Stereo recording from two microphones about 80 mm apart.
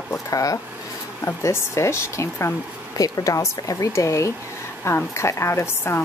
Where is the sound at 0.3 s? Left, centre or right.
Left.